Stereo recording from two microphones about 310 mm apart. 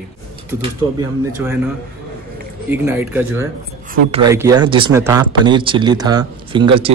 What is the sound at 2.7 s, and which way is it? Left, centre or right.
Speech, centre.